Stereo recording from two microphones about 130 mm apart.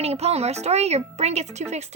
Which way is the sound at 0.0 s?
50° right (ahead or behind).